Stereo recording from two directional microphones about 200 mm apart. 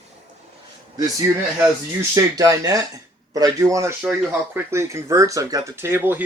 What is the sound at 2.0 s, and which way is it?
Speech, 15° right (ahead or behind).